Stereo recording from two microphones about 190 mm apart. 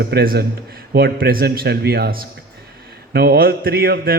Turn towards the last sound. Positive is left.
turn(degrees=-50)  # may be behind; listen again after turning